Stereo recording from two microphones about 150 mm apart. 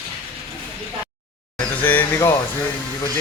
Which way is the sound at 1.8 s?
15° left (ahead or behind).